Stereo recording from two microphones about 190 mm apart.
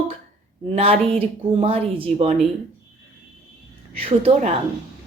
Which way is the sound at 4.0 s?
30° right (ahead or behind).